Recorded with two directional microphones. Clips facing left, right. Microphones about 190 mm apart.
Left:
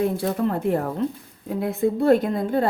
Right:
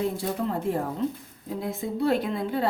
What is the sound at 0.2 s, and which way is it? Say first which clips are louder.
A woman's voice: left 5 dB; 65° left (ahead or behind).